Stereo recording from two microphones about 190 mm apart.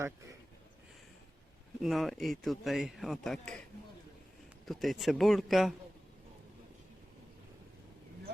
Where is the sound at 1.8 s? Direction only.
Centre (ahead or behind).